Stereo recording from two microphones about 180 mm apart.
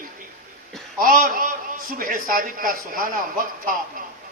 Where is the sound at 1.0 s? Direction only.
50° right (ahead or behind).